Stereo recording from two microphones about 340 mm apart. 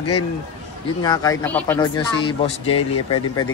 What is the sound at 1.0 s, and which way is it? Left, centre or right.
Speech, centre.